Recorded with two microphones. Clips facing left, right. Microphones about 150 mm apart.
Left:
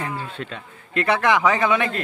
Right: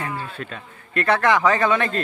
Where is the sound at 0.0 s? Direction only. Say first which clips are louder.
Even; 25° left (ahead or behind).